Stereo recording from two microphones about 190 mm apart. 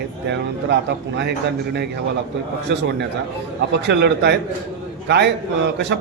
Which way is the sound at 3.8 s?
60° right (ahead or behind).